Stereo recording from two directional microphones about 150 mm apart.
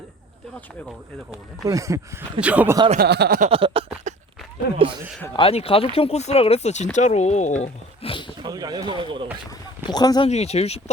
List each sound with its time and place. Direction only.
1.6 s speech: 20° right (ahead or behind)
2.4 s speech: 10° right (ahead or behind)
3.0 s speech: 85° right
3.5 s speech: 40° right (ahead or behind)
4.1 s a sound: 55° right (ahead or behind)
5.4 s speech: 40° left (ahead or behind)
7.6 s speech: 35° left (ahead or behind)
8.4 s speech: 25° right (ahead or behind)
9.8 s speech: 25° left (ahead or behind)
10.2 s speech: 45° left (ahead or behind)